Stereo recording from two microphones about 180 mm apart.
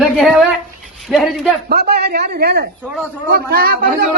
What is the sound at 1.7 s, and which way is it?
A man's voice, 60° right (ahead or behind).